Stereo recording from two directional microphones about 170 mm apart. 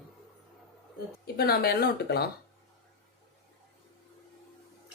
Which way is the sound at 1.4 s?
65° left (ahead or behind).